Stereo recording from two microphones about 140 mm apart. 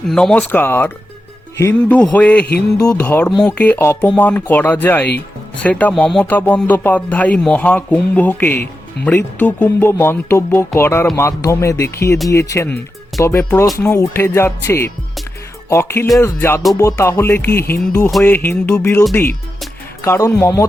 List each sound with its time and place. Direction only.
0.1 s speech: 5° left (ahead or behind)
2.7 s music: 25° left (ahead or behind)
3.0 s speech: 10° left (ahead or behind)
11.2 s music: 20° left (ahead or behind)
13.1 s speech: 20° left (ahead or behind)
13.7 s music: 20° left (ahead or behind)
15.7 s speech: 20° left (ahead or behind)
20.1 s music: 20° left (ahead or behind)